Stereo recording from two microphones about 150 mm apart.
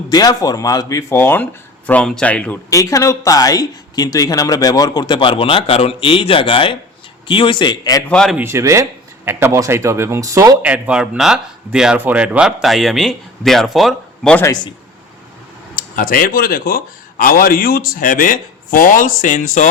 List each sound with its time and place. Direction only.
0.1 s a man's voice: 25° left (ahead or behind); by 2.6 s 10° left (ahead or behind)
2.6 s a man's voice: 20° left (ahead or behind)
8.0 s speech: 5° left (ahead or behind)
8.4 s speech: 15° right (ahead or behind)
10.6 s speech: 10° right (ahead or behind)
16.0 s a man's voice: 70° left (ahead or behind)